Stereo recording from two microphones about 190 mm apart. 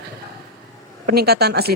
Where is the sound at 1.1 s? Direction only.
55° right (ahead or behind).